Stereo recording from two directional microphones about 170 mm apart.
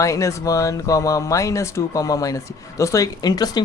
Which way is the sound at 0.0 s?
20° left (ahead or behind).